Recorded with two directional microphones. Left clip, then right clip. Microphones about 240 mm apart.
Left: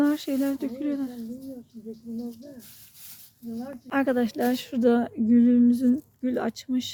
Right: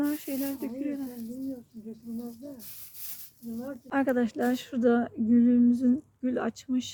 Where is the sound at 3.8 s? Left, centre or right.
Centre.